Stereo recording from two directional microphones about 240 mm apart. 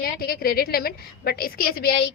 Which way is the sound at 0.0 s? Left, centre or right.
Left.